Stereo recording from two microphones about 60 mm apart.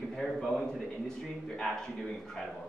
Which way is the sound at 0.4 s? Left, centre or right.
Centre.